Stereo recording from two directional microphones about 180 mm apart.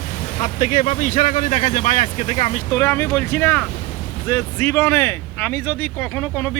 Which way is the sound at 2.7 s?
15° left (ahead or behind).